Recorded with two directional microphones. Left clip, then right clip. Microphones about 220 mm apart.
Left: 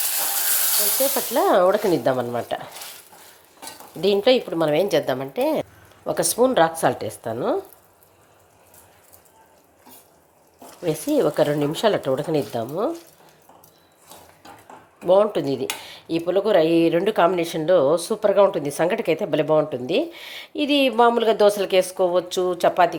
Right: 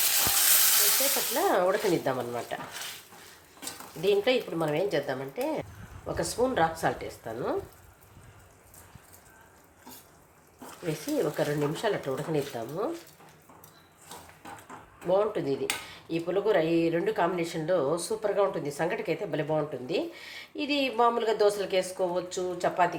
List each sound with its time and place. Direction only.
1.3 s cutlery: 30° left (ahead or behind)
4.0 s cutlery: 35° left (ahead or behind)
10.8 s cutlery: 35° left (ahead or behind)
15.0 s cutlery: 35° left (ahead or behind)